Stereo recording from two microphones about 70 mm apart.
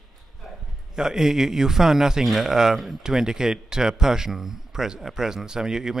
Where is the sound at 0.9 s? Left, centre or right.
Centre.